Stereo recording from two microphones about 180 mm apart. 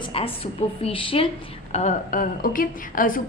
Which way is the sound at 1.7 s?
40° left (ahead or behind).